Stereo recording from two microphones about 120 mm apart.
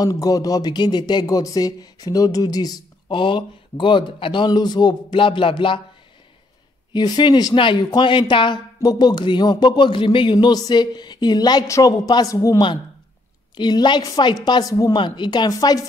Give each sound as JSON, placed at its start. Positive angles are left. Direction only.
{"t": 0.0, "sound": "speech", "side_deg": 30}
{"t": 6.9, "sound": "speech", "side_deg": 35}
{"t": 13.6, "sound": "speech", "side_deg": 40}